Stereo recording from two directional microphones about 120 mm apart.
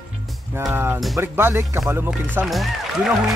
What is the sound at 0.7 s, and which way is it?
Speech, 20° right (ahead or behind).